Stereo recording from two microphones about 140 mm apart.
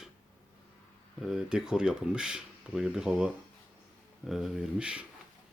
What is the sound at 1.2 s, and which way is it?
Speech, 5° right (ahead or behind).